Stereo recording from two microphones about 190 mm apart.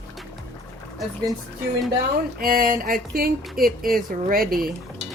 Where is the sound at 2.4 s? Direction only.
50° right (ahead or behind).